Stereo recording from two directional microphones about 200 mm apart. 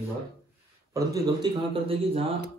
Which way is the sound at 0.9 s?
20° right (ahead or behind).